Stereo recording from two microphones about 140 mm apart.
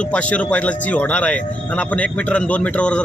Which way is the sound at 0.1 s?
10° left (ahead or behind).